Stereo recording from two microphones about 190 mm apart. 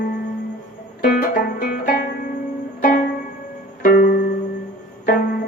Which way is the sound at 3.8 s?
50° left (ahead or behind).